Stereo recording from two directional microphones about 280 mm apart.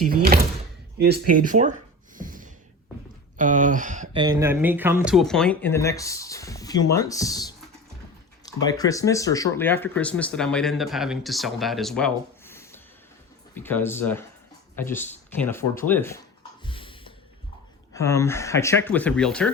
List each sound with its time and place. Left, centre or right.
0.0 s speech: right
2.1 s gasp: right
3.3 s speech: right; by 16.2 s centre
16.6 s a sound: centre
17.9 s speech: centre